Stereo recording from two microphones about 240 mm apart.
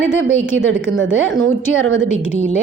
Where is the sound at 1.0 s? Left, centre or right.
Right.